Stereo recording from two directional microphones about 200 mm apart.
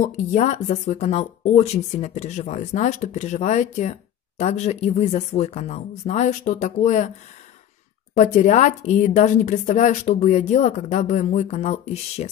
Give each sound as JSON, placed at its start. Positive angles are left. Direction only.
{"t": 0.0, "sound": "a woman's voice", "side_deg": 35}
{"t": 8.2, "sound": "a woman's voice", "side_deg": 35}